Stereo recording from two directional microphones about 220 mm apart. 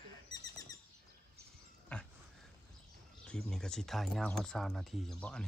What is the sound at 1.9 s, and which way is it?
Dog, 5° left (ahead or behind).